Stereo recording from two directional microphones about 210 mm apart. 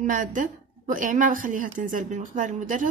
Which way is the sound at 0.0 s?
40° right (ahead or behind).